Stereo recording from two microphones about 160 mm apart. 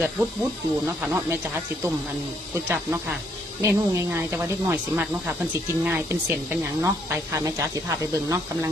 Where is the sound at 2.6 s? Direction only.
10° right (ahead or behind).